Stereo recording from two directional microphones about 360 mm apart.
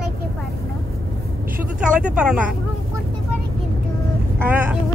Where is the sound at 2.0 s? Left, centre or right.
Centre.